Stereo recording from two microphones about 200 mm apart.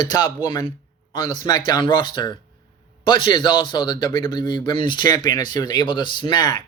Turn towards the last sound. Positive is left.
turn(degrees=20)  # may be behind; listen again after turning